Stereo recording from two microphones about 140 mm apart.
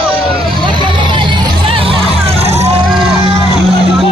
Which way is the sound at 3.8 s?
45° right (ahead or behind).